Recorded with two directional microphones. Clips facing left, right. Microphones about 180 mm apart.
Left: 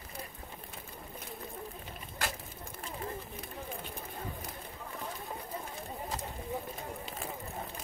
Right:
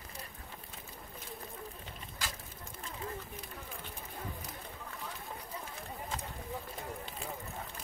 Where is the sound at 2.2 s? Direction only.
60° left (ahead or behind).